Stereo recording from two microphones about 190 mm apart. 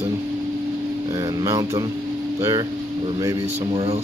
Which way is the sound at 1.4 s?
20° right (ahead or behind).